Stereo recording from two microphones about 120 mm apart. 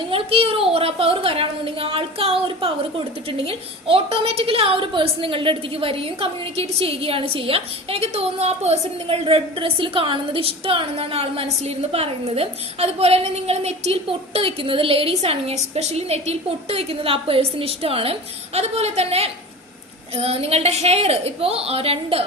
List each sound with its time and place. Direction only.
0.1 s a woman's voice: 50° right (ahead or behind)